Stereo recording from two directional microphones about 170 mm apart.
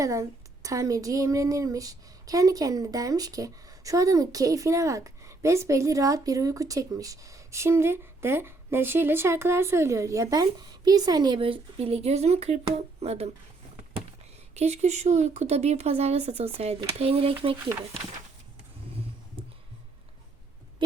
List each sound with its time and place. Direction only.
0.0 s a woman's voice: 20° right (ahead or behind); by 13.3 s 40° right (ahead or behind)
14.5 s speech: 40° right (ahead or behind)